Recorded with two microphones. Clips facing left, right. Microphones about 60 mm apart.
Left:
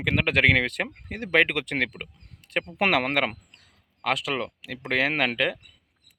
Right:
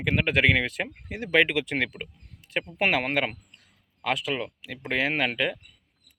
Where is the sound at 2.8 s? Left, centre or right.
Left.